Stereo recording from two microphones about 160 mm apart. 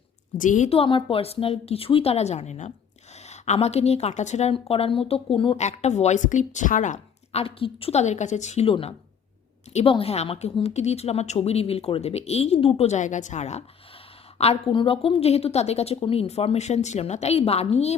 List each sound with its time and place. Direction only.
0.3 s speech: 55° left (ahead or behind)
0.7 s a woman's voice: 35° left (ahead or behind)
5.5 s speech: 45° left (ahead or behind)
7.4 s a woman's voice: 35° left (ahead or behind)